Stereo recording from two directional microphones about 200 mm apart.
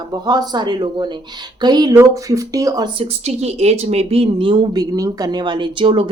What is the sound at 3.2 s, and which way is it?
A woman's voice, 35° right (ahead or behind).